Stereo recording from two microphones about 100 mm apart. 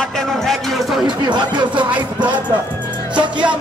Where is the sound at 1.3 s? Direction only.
50° right (ahead or behind).